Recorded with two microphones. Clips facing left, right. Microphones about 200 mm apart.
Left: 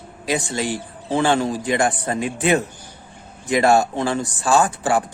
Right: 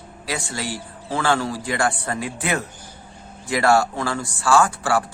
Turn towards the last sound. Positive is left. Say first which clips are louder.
# left 1 dB
turn(degrees=20)  # may be behind; listen again after turning